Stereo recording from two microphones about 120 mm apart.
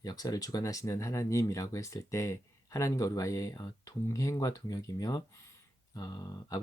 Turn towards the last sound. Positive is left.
turn(degrees=30)  # may be behind; listen again after turning